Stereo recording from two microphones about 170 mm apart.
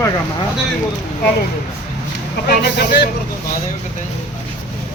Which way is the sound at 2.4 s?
75° left (ahead or behind).